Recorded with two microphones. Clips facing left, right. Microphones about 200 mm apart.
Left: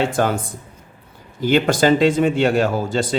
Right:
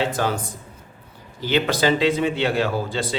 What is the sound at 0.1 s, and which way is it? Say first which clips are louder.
Speech: left 4 dB; 50° left (ahead or behind).